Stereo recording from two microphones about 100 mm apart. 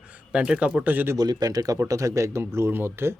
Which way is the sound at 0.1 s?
10° right (ahead or behind).